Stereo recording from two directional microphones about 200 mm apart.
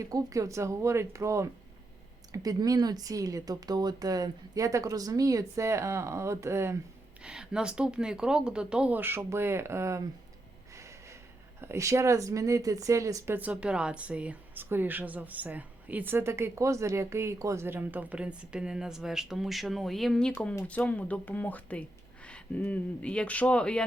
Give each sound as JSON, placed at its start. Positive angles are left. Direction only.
{"t": 0.0, "sound": "speech", "side_deg": -15}
{"t": 10.8, "sound": "snort", "side_deg": -15}
{"t": 11.6, "sound": "speech", "side_deg": -15}